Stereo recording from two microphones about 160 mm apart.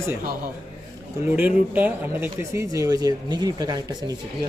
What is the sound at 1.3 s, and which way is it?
Speech, 10° right (ahead or behind).